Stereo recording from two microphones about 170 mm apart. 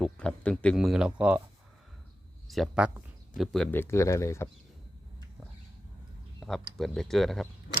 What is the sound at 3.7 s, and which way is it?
Speech, 15° left (ahead or behind).